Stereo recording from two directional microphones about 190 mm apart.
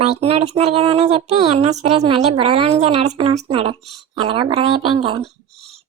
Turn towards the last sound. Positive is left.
turn(degrees=-25)  # may be behind; listen again after turning